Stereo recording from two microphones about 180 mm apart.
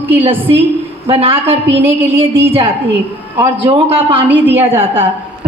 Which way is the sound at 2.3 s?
15° right (ahead or behind).